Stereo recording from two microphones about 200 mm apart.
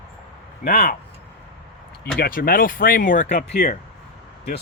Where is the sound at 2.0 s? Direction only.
45° left (ahead or behind).